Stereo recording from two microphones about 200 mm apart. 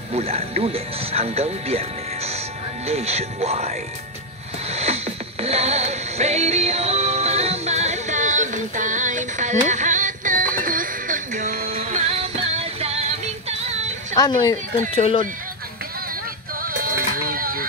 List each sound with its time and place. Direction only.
0.1 s speech: 30° right (ahead or behind)
4.6 s music: 30° right (ahead or behind)
11.7 s music: 30° right (ahead or behind)
14.2 s speech: 20° left (ahead or behind)
15.0 s speech: 30° left (ahead or behind)
16.6 s music: 45° right (ahead or behind)